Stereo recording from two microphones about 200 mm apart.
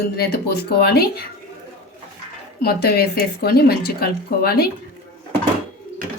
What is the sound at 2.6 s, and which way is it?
Speech, 50° left (ahead or behind).